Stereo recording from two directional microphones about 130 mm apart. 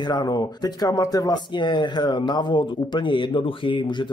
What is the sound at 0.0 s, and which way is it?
Speech, 30° left (ahead or behind).